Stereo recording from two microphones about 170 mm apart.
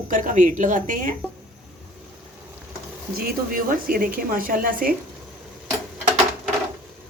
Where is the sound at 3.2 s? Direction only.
60° right (ahead or behind).